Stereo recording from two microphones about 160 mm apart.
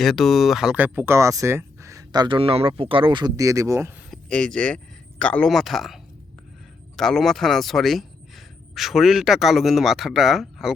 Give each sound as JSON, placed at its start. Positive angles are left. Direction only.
{"t": 0.0, "sound": "speech", "side_deg": 0}
{"t": 4.1, "sound": "speech", "side_deg": 5}